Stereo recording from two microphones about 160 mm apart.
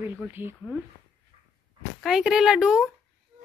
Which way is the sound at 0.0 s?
15° right (ahead or behind).